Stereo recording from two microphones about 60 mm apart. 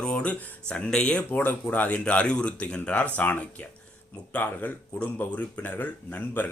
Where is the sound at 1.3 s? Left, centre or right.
Left.